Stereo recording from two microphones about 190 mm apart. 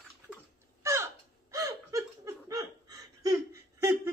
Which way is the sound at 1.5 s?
15° right (ahead or behind).